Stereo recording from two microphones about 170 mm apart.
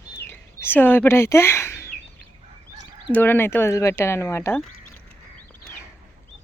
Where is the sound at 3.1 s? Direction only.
10° left (ahead or behind).